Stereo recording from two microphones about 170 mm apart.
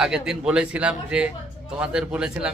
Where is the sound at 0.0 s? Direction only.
5° right (ahead or behind).